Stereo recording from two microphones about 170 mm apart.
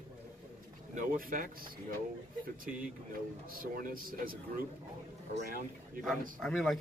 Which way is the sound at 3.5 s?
55° right (ahead or behind).